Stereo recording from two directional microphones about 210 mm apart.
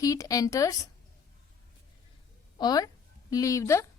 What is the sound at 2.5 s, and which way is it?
A woman's voice, 20° left (ahead or behind).